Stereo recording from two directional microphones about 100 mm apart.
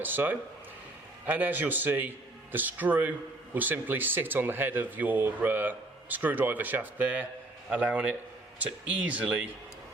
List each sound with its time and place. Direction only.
0.0 s a man's voice: 20° right (ahead or behind)